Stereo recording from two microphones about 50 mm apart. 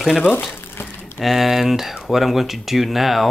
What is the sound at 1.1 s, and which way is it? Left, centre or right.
Speech, centre.